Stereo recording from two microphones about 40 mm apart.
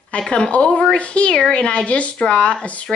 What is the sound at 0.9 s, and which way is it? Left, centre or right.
Speech, left.